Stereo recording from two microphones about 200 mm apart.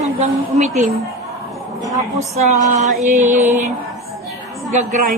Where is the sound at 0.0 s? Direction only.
35° right (ahead or behind).